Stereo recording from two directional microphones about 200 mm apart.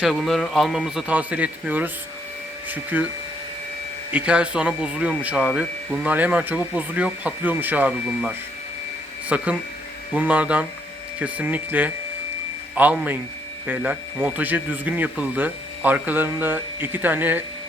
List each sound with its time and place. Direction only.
0.0 s a man's voice: centre (ahead or behind)
4.1 s speech: 5° right (ahead or behind)